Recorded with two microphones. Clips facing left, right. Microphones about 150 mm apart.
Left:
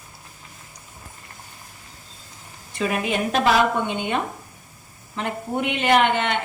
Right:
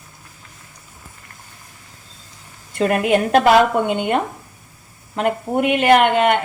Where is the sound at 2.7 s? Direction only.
60° right (ahead or behind).